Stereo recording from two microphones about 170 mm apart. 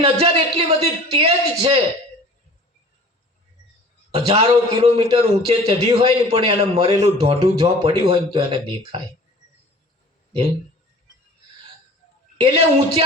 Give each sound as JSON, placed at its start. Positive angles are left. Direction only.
{"t": 0.0, "sound": "a sound", "side_deg": -35}
{"t": 1.1, "sound": "a man's voice", "side_deg": -35}
{"t": 4.3, "sound": "a man's voice", "side_deg": -35}
{"t": 12.4, "sound": "a man's voice", "side_deg": -35}